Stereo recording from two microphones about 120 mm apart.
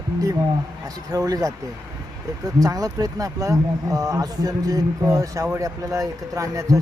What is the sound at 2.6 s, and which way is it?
Speech, 30° right (ahead or behind).